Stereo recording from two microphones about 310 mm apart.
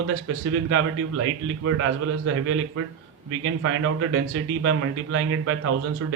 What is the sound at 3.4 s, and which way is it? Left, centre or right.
A man's voice, right.